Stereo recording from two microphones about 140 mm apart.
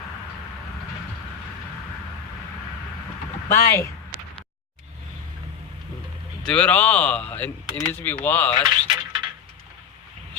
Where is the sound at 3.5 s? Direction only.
20° left (ahead or behind).